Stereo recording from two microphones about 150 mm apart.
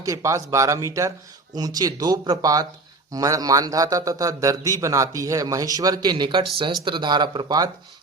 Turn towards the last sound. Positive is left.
turn(degrees=-25)  # may be behind; listen again after turning